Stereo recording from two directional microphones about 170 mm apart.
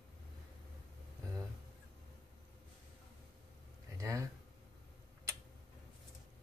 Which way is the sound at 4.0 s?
20° right (ahead or behind).